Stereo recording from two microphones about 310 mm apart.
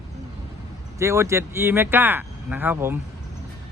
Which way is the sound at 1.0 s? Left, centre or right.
Centre.